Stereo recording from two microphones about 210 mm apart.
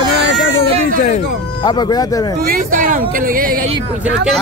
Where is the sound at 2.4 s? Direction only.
45° right (ahead or behind).